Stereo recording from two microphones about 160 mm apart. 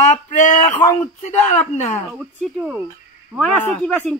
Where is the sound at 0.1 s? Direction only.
50° left (ahead or behind).